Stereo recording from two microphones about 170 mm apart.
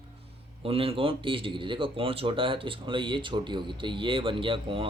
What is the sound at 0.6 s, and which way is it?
A man's voice, 35° right (ahead or behind).